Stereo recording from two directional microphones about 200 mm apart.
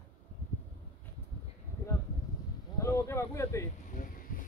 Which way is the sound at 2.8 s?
15° left (ahead or behind).